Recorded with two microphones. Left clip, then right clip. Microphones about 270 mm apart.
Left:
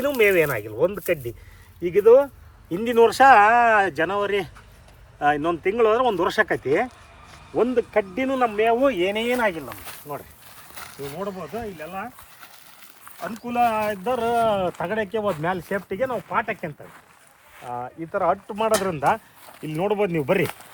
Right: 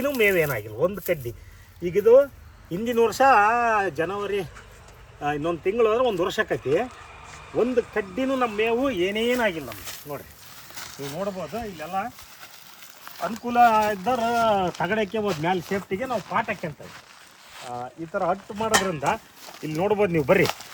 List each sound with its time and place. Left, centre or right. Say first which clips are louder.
0.0 s speech: left 3 dB; centre
3.2 s speech: left 4 dB; left
3.8 s speech: left 4 dB; centre
10.8 s a sound: even; centre
11.5 s speech: right 2 dB; centre
17.7 s speech: left 3 dB; left
18.9 s speech: left 4 dB; centre